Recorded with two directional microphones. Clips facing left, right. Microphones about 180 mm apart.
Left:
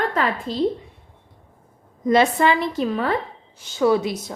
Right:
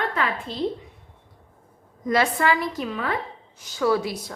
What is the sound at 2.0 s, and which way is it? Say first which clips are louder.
A woman's voice: left 4 dB; 25° left (ahead or behind).